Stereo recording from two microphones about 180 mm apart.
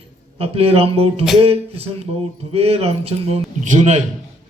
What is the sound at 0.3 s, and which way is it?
Speech, 30° right (ahead or behind).